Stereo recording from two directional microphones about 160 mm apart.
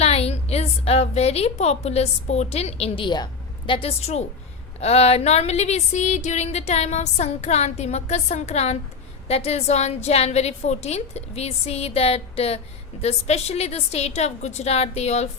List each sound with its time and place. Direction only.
0.0 s a woman's voice: 40° left (ahead or behind)